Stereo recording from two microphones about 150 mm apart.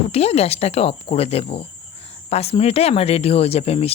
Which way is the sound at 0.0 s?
40° left (ahead or behind).